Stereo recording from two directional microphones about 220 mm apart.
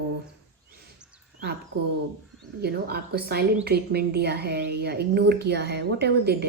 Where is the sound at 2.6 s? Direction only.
45° right (ahead or behind).